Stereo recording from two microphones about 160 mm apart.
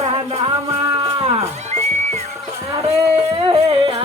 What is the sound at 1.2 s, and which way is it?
Music, 40° right (ahead or behind).